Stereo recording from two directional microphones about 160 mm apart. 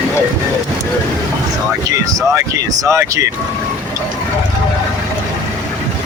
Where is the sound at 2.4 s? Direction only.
20° right (ahead or behind).